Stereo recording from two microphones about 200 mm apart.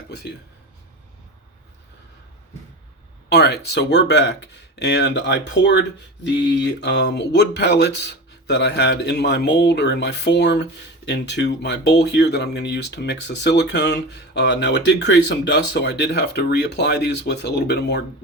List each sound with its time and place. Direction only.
3.2 s speech: 55° left (ahead or behind)